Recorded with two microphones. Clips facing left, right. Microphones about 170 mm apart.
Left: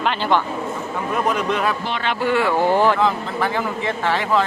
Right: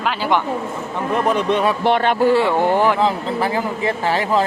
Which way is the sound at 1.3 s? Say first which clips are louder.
Right 3 dB; 30° right (ahead or behind).